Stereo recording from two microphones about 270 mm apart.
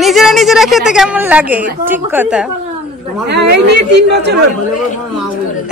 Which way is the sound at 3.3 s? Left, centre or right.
Right.